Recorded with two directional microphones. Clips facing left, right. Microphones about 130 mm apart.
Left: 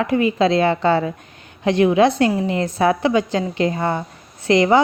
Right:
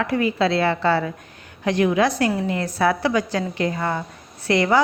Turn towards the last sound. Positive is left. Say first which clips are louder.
# left 4 dB
turn(degrees=20)  # may be behind; listen again after turning